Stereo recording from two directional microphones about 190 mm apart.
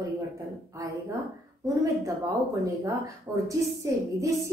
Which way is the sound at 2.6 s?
15° right (ahead or behind).